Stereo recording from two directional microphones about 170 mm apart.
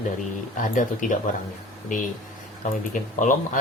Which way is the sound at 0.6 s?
50° left (ahead or behind).